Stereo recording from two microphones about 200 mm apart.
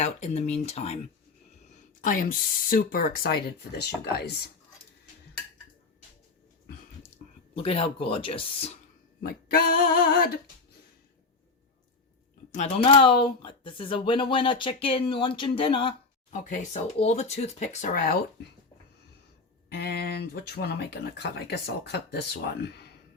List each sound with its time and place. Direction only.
0.0 s speech: 35° left (ahead or behind)
2.6 s speech: 45° left (ahead or behind)
7.2 s a sound: 40° left (ahead or behind)
7.5 s speech: 30° left (ahead or behind)
9.2 s speech: 45° left (ahead or behind)
12.5 s speech: 35° left (ahead or behind)
19.7 s speech: 55° left (ahead or behind)